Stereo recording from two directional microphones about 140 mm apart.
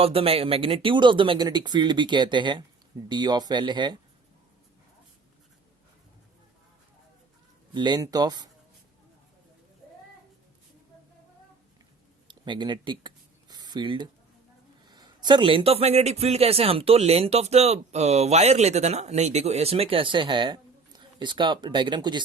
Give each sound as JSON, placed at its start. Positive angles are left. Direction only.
{"t": 0.0, "sound": "speech", "side_deg": -45}
{"t": 7.7, "sound": "speech", "side_deg": -30}
{"t": 12.3, "sound": "a sound", "side_deg": -35}
{"t": 14.8, "sound": "a man's voice", "side_deg": -30}